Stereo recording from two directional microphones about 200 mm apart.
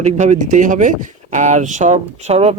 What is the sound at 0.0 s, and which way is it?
Speech, 35° right (ahead or behind).